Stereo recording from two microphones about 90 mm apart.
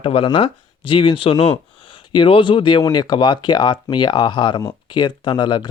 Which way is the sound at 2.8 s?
50° left (ahead or behind).